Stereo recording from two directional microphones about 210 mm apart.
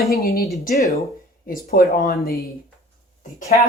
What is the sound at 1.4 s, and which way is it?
Speech, 45° left (ahead or behind).